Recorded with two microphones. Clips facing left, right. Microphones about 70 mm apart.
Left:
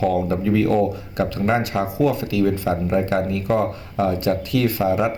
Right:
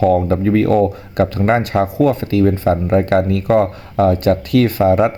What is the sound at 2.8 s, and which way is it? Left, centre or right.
Speech, right.